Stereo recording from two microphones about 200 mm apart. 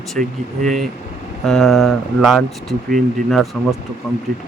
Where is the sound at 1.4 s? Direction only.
Centre (ahead or behind).